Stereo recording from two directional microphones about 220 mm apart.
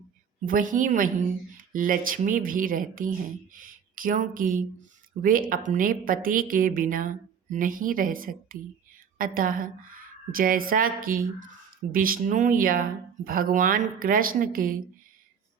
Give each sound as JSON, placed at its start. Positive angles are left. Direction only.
{"t": 0.4, "sound": "a woman's voice", "side_deg": -35}